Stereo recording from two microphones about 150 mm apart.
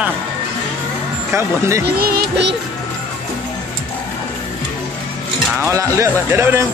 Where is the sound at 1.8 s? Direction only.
90° right.